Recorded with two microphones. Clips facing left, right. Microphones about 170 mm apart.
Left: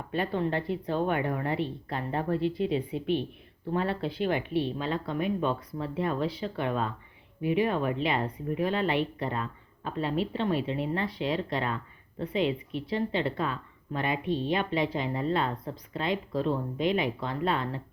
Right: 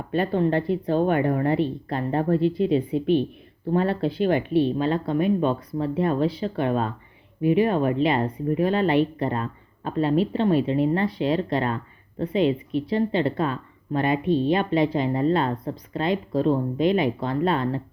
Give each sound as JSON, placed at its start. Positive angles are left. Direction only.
{"t": 0.1, "sound": "speech", "side_deg": -40}